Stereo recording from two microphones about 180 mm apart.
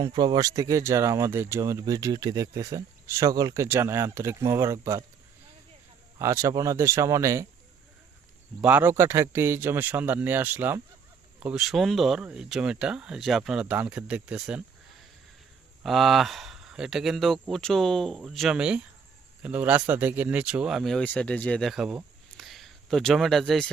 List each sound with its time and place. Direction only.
0.0 s speech: 20° right (ahead or behind)
6.1 s speech: 15° right (ahead or behind)
8.6 s speech: 10° right (ahead or behind)
15.8 s speech: centre (ahead or behind)